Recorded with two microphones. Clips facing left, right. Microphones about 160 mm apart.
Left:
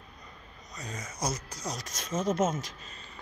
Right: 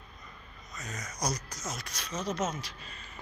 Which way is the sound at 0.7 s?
30° left (ahead or behind).